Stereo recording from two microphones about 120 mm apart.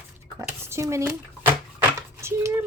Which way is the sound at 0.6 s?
25° right (ahead or behind).